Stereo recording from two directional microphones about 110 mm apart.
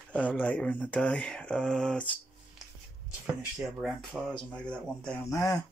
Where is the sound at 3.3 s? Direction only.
Centre (ahead or behind).